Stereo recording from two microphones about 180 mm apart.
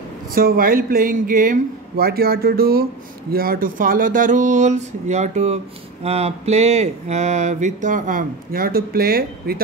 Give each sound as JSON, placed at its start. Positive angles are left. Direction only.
{"t": 0.3, "sound": "speech", "side_deg": -55}
{"t": 6.0, "sound": "mantra", "side_deg": -35}